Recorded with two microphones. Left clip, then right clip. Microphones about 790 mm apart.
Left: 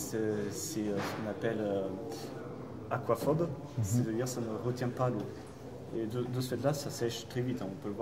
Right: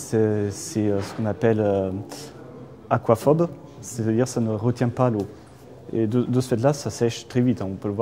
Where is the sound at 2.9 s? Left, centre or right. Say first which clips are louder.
Right 12 dB; right.